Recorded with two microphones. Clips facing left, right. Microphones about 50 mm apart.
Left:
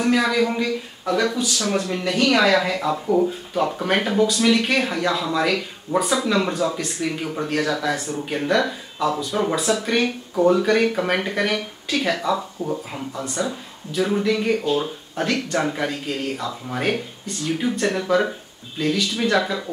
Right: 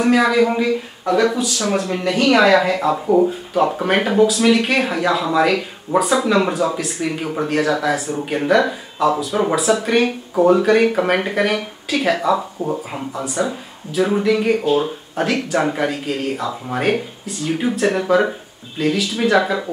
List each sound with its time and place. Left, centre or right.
0.0 s speech: centre
12.6 s speech: centre
13.1 s speech: centre